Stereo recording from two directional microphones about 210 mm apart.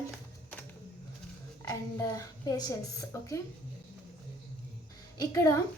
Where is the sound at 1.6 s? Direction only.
15° left (ahead or behind).